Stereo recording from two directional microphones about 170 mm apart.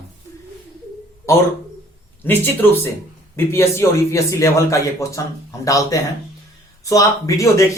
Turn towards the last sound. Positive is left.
turn(degrees=20)  # may be behind; listen again after turning